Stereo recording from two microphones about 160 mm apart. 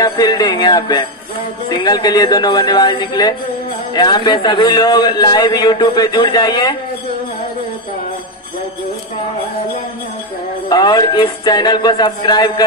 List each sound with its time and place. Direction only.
0.0 s music: 25° left (ahead or behind)
1.7 s a man's voice: 25° left (ahead or behind)
10.7 s a man's voice: 25° left (ahead or behind)